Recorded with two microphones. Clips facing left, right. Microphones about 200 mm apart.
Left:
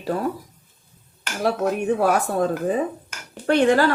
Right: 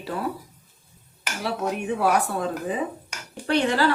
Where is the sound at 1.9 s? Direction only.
45° left (ahead or behind).